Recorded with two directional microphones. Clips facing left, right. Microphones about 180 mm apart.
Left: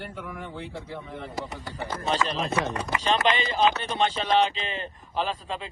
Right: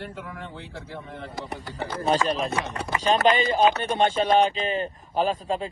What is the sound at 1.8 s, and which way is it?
Speech, 35° right (ahead or behind).